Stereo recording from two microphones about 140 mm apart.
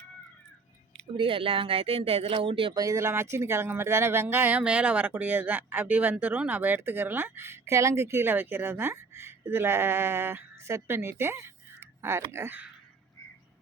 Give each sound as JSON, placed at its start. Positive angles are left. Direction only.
{"t": 1.1, "sound": "speech", "side_deg": -40}
{"t": 2.7, "sound": "speech", "side_deg": -25}